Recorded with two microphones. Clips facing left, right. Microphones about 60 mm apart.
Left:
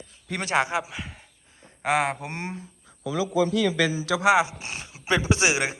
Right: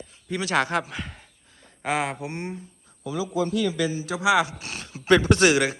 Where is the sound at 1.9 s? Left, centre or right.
Left.